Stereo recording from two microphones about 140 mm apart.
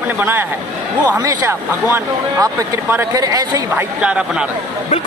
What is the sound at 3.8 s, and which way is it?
Speech, 10° right (ahead or behind).